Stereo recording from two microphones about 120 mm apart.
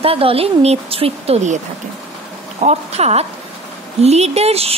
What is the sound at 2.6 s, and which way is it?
Speech, 65° right (ahead or behind).